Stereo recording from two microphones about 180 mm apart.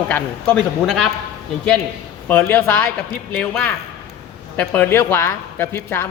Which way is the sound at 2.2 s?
10° left (ahead or behind).